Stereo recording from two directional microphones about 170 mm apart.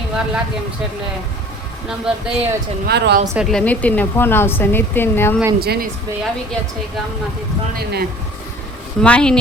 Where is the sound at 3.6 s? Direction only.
10° left (ahead or behind).